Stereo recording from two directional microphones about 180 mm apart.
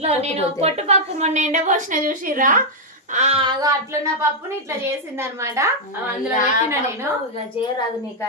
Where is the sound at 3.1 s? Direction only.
35° right (ahead or behind).